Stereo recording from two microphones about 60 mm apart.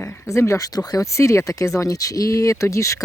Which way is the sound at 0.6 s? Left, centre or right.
Left.